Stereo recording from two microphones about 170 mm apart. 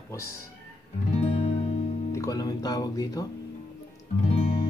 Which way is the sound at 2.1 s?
20° left (ahead or behind).